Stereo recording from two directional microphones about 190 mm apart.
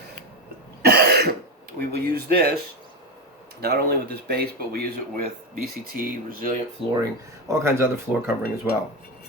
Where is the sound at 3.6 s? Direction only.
55° right (ahead or behind).